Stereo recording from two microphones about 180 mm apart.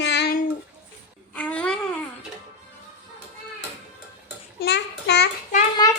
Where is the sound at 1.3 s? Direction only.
5° left (ahead or behind).